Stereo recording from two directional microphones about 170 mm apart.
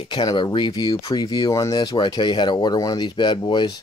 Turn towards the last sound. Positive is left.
turn(degrees=25)  # may be behind; listen again after turning